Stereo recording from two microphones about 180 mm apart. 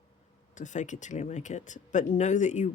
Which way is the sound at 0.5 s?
45° left (ahead or behind).